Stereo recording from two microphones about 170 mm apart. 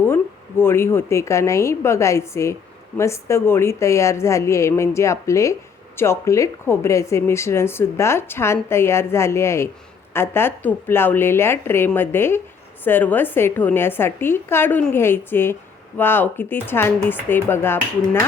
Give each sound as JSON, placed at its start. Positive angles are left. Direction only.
{"t": 0.0, "sound": "speech", "side_deg": 15}